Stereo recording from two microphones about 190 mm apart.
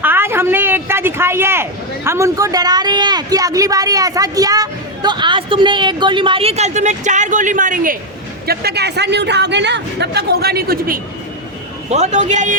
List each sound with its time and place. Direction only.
0.0 s a sound: 10° right (ahead or behind)
2.0 s a woman's voice: 15° right (ahead or behind); by 7.9 s 45° right (ahead or behind)
8.4 s speech: 60° right (ahead or behind)
11.9 s a man's voice: 35° right (ahead or behind)